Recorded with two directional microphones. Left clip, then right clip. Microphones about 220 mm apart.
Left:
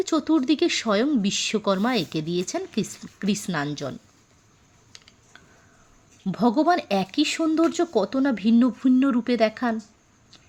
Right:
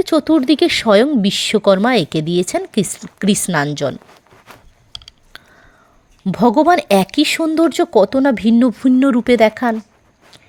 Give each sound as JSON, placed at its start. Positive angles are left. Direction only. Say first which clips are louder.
{"t": 0.0, "sound": "speech", "louder": "right 9 dB", "side_deg": -30}
{"t": 5.3, "sound": "a sound", "louder": "right 12 dB", "side_deg": -50}
{"t": 6.2, "sound": "speech", "louder": "right 9 dB", "side_deg": -40}